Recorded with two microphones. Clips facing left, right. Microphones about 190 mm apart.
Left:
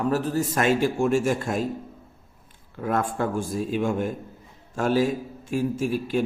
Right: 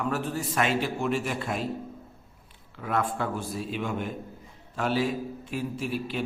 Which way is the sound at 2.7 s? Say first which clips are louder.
Left 3 dB; 45° left (ahead or behind).